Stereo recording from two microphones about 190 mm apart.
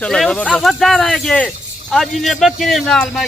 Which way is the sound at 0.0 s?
5° left (ahead or behind).